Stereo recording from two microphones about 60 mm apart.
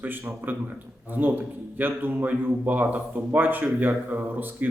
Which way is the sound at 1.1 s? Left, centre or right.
Right.